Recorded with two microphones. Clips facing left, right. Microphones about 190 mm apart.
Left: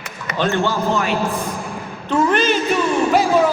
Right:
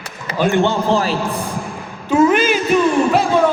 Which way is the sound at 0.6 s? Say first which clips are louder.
Right 3 dB; 30° right (ahead or behind).